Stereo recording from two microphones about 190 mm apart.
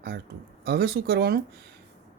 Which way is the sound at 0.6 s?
55° right (ahead or behind).